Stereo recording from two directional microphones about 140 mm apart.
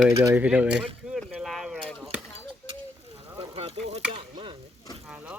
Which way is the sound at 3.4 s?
45° right (ahead or behind).